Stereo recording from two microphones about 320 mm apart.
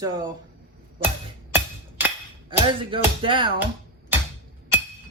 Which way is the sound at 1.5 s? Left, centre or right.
Centre.